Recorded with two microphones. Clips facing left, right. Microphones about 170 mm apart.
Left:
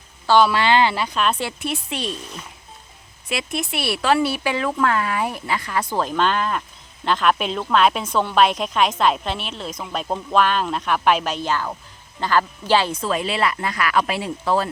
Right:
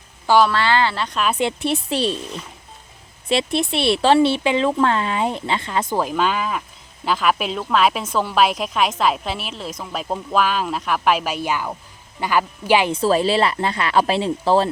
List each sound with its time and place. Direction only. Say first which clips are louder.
0.5 s speech: left 1 dB; 15° left (ahead or behind)
1.1 s speech: even; 5° right (ahead or behind)
1.4 s a woman's voice: right 6 dB; 20° right (ahead or behind)
3.2 s speech: right 6 dB; 30° right (ahead or behind)
5.9 s speech: even; 10° right (ahead or behind)
12.9 s speech: right 6 dB; 35° right (ahead or behind)